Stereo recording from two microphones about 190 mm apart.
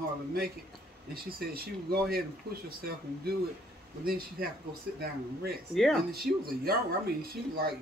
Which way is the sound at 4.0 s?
50° right (ahead or behind).